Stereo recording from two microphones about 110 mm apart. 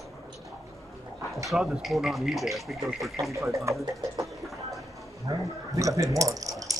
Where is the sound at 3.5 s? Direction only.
30° right (ahead or behind).